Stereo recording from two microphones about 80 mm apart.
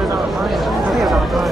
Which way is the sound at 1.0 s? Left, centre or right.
Centre.